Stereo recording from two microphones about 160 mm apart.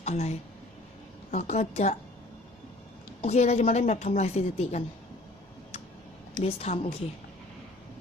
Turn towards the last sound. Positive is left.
turn(degrees=40)  # may be behind; listen again after turning